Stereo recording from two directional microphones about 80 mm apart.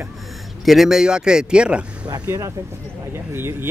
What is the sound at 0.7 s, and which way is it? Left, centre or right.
Speech, centre.